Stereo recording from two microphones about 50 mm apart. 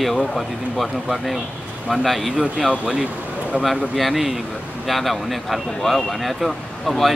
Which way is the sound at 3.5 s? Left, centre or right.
Centre.